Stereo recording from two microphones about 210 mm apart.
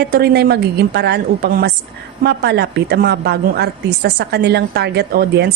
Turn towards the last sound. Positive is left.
turn(degrees=-50)  # may be behind; listen again after turning